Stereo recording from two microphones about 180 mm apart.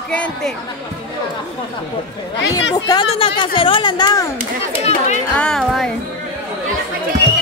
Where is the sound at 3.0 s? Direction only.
30° left (ahead or behind).